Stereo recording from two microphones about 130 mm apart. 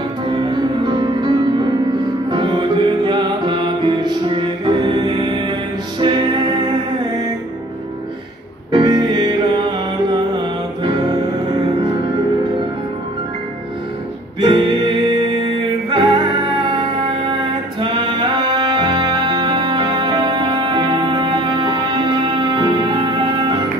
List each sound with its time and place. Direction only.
0.3 s music: 35° right (ahead or behind)
8.7 s music: 35° right (ahead or behind)
14.4 s music: 40° right (ahead or behind)